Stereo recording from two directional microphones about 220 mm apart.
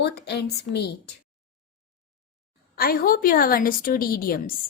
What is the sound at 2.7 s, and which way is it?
A woman's voice, 45° left (ahead or behind).